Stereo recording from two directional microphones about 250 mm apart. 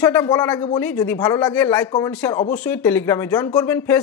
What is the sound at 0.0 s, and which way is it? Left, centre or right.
A woman's voice, centre.